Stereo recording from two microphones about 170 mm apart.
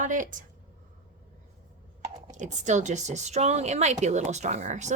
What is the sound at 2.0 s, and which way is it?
A woman's voice, 45° right (ahead or behind).